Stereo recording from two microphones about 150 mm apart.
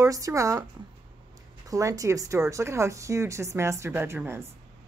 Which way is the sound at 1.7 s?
20° right (ahead or behind).